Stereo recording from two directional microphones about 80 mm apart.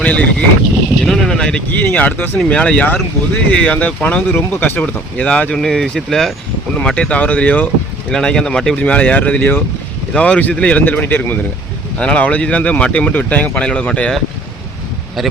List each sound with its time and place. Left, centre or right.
0.0 s speech: centre
1.0 s speech: centre
1.8 s speech: left
2.5 s speech: centre
4.8 s speech: centre
8.1 s speech: centre; by 9.6 s left
10.2 s speech: centre
15.2 s speech: centre